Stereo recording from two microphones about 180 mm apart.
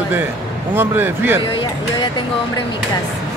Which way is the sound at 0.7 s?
10° right (ahead or behind).